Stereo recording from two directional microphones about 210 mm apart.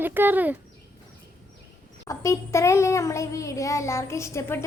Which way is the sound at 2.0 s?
15° left (ahead or behind).